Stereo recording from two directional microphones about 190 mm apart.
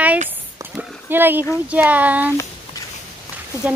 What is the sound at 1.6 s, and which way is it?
Speech, 10° right (ahead or behind).